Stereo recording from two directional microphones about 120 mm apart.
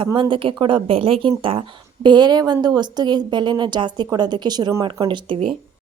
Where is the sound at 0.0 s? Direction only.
45° right (ahead or behind).